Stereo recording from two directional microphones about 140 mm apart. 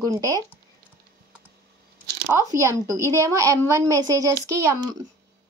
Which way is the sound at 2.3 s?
10° right (ahead or behind).